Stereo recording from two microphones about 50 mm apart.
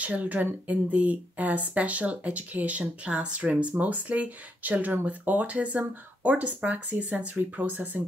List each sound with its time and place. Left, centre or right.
0.0 s speech: right